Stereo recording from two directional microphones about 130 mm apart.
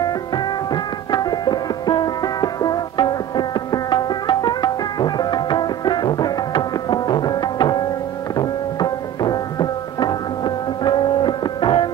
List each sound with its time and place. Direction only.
1.1 s music: 30° left (ahead or behind)